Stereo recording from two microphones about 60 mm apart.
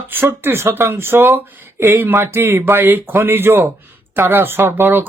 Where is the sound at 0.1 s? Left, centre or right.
Right.